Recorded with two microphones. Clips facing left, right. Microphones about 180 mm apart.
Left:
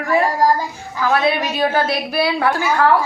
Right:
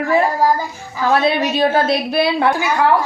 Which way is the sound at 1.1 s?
25° right (ahead or behind).